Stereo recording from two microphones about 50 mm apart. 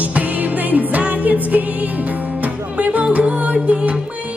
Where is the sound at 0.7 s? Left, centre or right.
Right.